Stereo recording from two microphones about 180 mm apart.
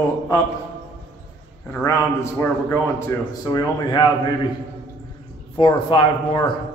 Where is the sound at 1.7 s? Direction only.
10° left (ahead or behind).